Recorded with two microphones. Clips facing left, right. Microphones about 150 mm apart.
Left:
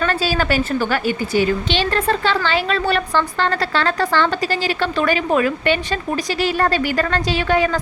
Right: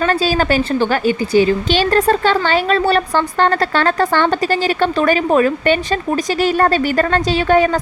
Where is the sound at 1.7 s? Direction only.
40° right (ahead or behind).